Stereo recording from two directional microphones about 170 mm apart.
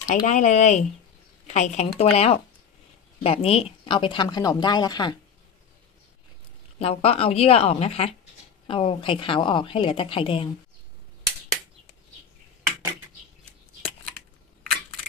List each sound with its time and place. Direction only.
0.0 s a woman's voice: 45° left (ahead or behind); by 5.1 s 25° left (ahead or behind)
6.8 s a woman's voice: 35° left (ahead or behind)